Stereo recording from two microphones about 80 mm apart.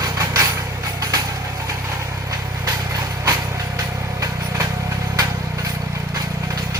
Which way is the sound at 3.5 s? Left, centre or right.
Right.